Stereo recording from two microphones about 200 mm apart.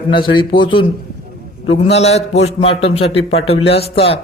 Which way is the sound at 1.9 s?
30° left (ahead or behind).